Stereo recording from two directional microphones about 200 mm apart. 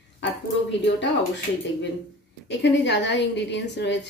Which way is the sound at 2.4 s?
60° left (ahead or behind).